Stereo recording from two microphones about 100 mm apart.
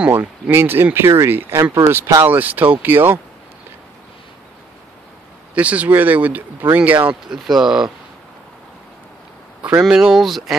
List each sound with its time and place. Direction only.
0.1 s speech: 20° right (ahead or behind)
5.5 s speech: 15° right (ahead or behind)
7.3 s speech: centre (ahead or behind)
9.8 s speech: 5° right (ahead or behind)